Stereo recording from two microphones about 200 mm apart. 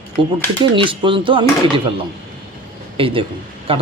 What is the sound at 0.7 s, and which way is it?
Speech, 25° right (ahead or behind).